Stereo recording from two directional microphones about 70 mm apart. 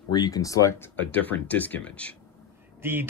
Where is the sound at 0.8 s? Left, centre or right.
Left.